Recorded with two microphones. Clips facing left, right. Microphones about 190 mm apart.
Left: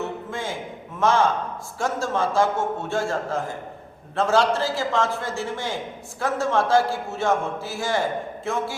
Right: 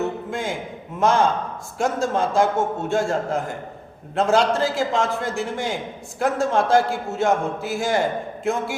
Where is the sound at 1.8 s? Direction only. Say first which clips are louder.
Right 3 dB; 15° right (ahead or behind).